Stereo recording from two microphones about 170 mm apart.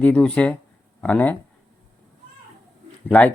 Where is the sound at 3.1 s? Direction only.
10° left (ahead or behind).